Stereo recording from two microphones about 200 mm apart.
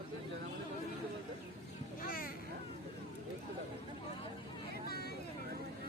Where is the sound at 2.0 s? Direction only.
45° left (ahead or behind).